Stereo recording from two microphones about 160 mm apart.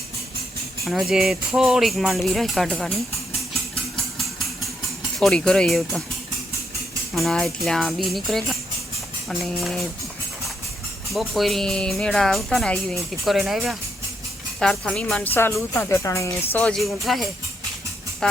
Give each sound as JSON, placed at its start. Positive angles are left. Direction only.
{"t": 0.9, "sound": "speech", "side_deg": 0}
{"t": 3.9, "sound": "engine", "side_deg": 0}
{"t": 5.2, "sound": "speech", "side_deg": 5}
{"t": 7.1, "sound": "speech", "side_deg": 0}
{"t": 11.1, "sound": "speech", "side_deg": 0}
{"t": 18.2, "sound": "music", "side_deg": 5}